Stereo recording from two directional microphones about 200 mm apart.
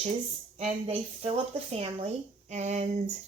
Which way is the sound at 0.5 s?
30° right (ahead or behind).